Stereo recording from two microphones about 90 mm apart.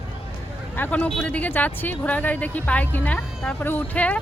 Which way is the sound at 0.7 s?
20° left (ahead or behind).